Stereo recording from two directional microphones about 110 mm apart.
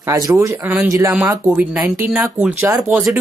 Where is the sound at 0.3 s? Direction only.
30° right (ahead or behind).